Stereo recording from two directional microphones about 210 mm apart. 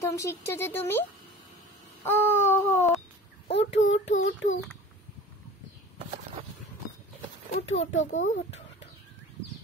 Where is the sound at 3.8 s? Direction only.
65° left (ahead or behind).